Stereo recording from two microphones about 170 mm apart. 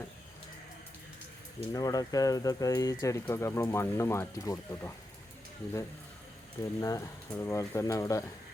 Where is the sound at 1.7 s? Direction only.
20° left (ahead or behind).